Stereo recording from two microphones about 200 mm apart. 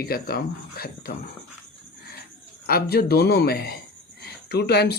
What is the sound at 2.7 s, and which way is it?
Speech, 50° left (ahead or behind).